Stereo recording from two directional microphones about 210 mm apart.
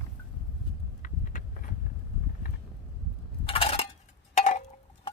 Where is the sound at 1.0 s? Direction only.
40° left (ahead or behind).